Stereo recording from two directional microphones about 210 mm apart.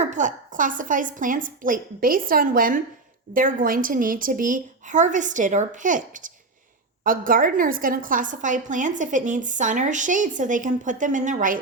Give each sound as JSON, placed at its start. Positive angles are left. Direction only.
{"t": 0.0, "sound": "a woman's voice", "side_deg": -35}